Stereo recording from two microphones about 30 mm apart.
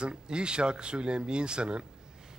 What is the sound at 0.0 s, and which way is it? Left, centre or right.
A man's voice, right.